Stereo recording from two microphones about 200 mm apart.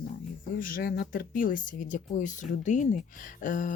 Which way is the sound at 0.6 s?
45° left (ahead or behind).